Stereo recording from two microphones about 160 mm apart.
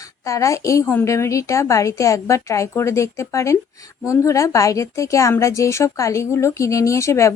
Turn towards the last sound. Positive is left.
turn(degrees=20)  # may be behind; listen again after turning